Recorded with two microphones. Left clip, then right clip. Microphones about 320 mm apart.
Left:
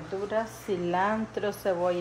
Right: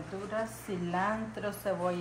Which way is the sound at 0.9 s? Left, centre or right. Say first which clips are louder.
Left 4 dB; left.